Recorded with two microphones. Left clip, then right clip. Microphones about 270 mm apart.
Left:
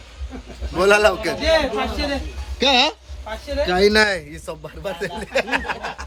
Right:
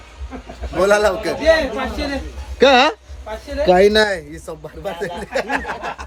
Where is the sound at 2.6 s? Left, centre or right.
Centre.